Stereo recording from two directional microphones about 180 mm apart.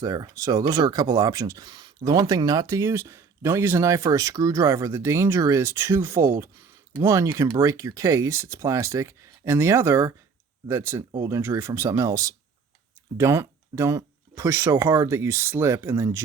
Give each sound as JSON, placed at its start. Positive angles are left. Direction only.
{"t": 0.0, "sound": "speech", "side_deg": -20}